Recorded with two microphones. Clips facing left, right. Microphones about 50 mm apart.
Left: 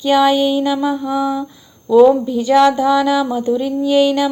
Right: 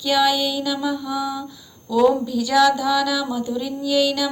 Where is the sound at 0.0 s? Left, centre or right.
Left.